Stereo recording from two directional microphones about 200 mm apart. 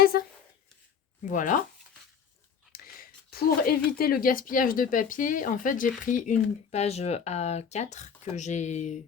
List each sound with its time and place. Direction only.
0.1 s speech: 50° left (ahead or behind)
1.2 s speech: 40° left (ahead or behind)
2.7 s speech: 45° left (ahead or behind)